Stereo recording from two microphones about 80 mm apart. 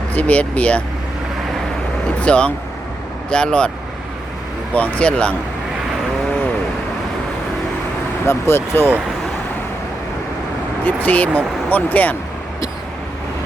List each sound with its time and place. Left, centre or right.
0.1 s speech: centre
2.2 s speech: centre
4.7 s speech: centre
8.3 s speech: left
10.8 s speech: centre